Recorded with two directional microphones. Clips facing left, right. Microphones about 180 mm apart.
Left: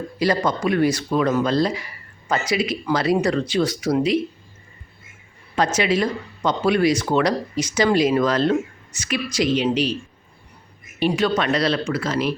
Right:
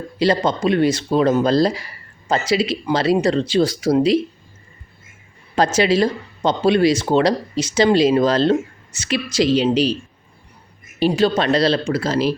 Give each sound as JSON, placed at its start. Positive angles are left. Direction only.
{"t": 0.2, "sound": "speech", "side_deg": -25}
{"t": 5.5, "sound": "speech", "side_deg": -30}
{"t": 11.0, "sound": "speech", "side_deg": -30}